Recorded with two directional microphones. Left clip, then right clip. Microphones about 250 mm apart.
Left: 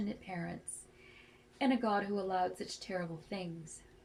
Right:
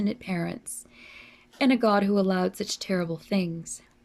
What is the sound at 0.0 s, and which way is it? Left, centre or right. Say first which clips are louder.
Speech: right 11 dB; right.